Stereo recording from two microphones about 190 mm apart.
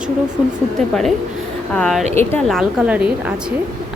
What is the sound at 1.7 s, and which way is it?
A woman's voice, centre (ahead or behind).